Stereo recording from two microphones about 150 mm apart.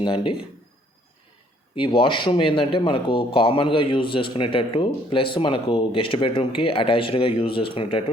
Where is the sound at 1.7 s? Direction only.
35° left (ahead or behind).